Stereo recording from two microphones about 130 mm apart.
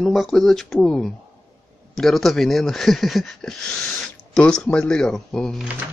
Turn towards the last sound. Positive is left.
turn(degrees=0)  # may be behind; listen again after turning